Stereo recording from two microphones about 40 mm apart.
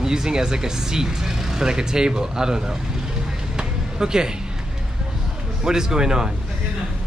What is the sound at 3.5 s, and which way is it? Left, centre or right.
Music, centre.